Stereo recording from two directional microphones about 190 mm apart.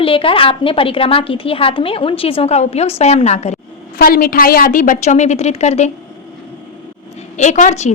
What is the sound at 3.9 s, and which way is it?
A woman's voice, 50° left (ahead or behind).